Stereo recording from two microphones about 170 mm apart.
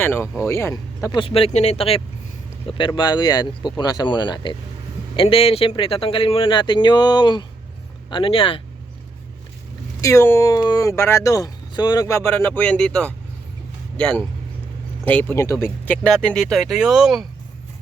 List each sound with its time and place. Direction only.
0.0 s a man's voice: 15° left (ahead or behind); by 8.6 s 30° left (ahead or behind)
10.0 s speech: 15° left (ahead or behind); by 17.2 s centre (ahead or behind)